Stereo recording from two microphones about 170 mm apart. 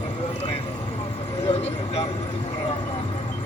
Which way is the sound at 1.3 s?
35° left (ahead or behind).